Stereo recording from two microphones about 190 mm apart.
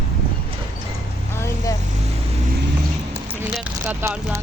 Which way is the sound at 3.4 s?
10° right (ahead or behind).